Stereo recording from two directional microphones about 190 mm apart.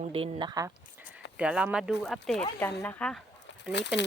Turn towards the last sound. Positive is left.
turn(degrees=65)  # may be behind; listen again after turning